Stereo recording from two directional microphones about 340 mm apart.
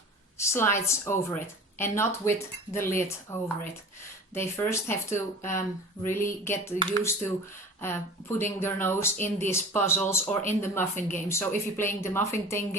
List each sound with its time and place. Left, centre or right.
0.3 s a sound: centre
0.9 s speech: centre
4.4 s speech: centre